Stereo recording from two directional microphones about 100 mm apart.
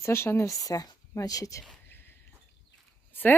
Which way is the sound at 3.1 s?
20° left (ahead or behind).